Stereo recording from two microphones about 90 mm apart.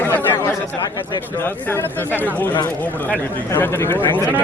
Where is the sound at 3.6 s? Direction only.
25° left (ahead or behind).